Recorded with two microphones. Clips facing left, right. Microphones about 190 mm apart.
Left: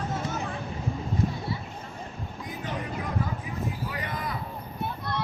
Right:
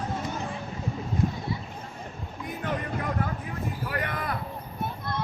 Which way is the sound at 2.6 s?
60° right (ahead or behind).